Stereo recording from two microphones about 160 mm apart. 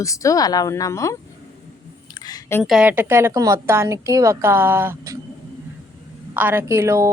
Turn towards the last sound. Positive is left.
turn(degrees=-20)  # may be behind; listen again after turning